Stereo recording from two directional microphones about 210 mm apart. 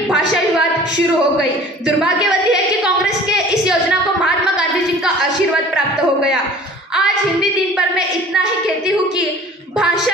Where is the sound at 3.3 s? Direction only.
5° right (ahead or behind).